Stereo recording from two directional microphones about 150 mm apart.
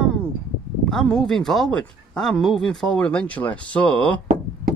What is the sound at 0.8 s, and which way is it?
Speech, 5° left (ahead or behind).